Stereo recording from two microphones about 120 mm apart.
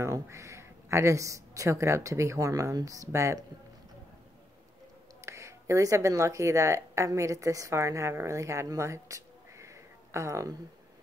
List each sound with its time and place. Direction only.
0.0 s speech: 25° right (ahead or behind)
5.2 s speech: 25° right (ahead or behind)